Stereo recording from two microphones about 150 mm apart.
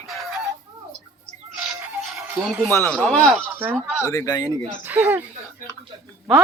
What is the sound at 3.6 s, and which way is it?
Speech, 10° right (ahead or behind).